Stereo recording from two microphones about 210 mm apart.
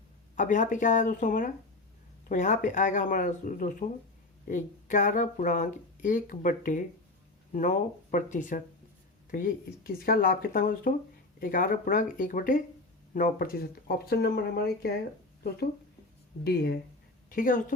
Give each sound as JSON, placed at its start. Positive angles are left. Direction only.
{"t": 0.3, "sound": "speech", "side_deg": 40}
{"t": 16.4, "sound": "speech", "side_deg": 50}